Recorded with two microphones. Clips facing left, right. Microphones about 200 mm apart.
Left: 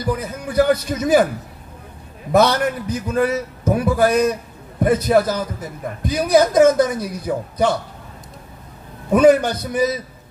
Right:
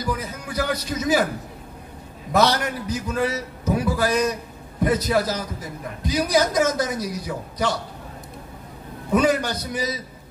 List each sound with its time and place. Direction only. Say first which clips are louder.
0.0 s a man's voice: left 5 dB; 55° left (ahead or behind)
2.3 s a man's voice: left 5 dB; 55° left (ahead or behind)
9.1 s a man's voice: left 7 dB; 55° left (ahead or behind)